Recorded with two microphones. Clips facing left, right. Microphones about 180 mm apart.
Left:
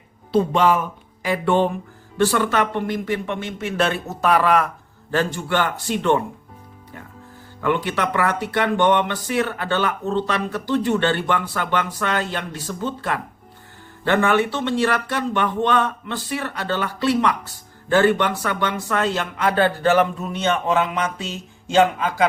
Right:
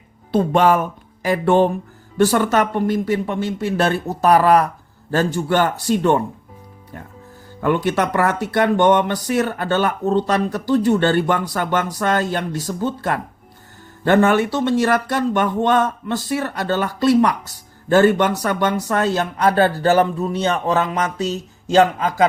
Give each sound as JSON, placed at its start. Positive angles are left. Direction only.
{"t": 0.3, "sound": "speech", "side_deg": -50}
{"t": 7.6, "sound": "speech", "side_deg": -45}